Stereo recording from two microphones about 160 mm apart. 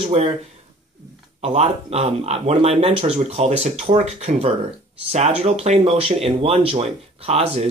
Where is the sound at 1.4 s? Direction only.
40° right (ahead or behind).